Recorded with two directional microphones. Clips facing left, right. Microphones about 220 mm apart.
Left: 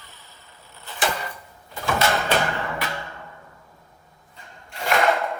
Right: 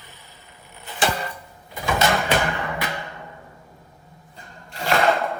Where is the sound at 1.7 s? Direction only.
15° right (ahead or behind).